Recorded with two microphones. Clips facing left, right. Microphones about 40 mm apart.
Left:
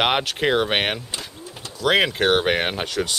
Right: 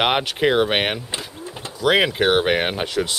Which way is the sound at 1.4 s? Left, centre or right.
Right.